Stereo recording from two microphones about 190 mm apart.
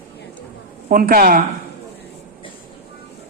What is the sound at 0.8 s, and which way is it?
Speech, 50° right (ahead or behind).